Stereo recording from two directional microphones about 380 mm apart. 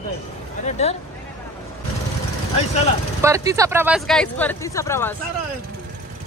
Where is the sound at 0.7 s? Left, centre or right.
Centre.